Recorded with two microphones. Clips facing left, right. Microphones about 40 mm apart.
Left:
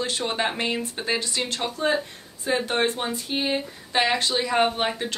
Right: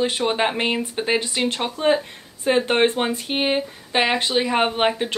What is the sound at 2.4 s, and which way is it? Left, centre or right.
Speech, right.